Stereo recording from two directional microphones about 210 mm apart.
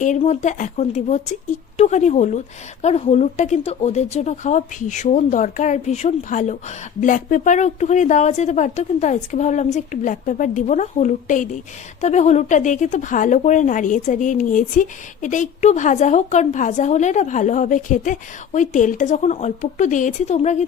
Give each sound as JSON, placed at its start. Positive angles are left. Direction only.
{"t": 0.0, "sound": "speech", "side_deg": 35}